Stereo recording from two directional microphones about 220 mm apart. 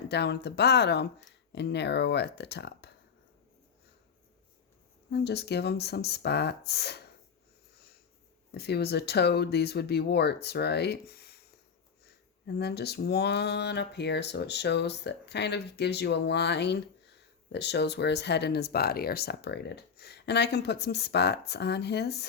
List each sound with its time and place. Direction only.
0.1 s speech: 50° left (ahead or behind)
5.1 s speech: 50° left (ahead or behind)
8.5 s speech: 45° left (ahead or behind)
12.5 s speech: 45° left (ahead or behind)